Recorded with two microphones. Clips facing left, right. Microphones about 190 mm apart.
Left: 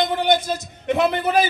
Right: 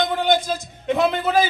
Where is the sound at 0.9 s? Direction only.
15° left (ahead or behind).